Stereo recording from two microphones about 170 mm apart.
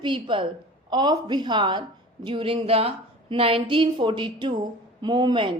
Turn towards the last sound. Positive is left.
turn(degrees=-30)  # may be behind; listen again after turning